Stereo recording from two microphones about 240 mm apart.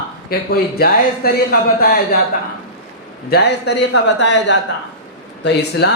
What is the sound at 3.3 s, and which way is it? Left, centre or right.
A man's voice, left.